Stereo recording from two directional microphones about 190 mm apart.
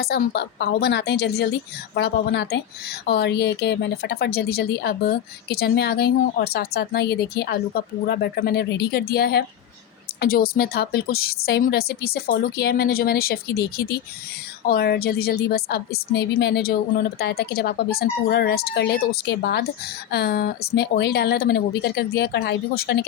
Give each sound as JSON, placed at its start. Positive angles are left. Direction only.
{"t": 0.0, "sound": "speech", "side_deg": 60}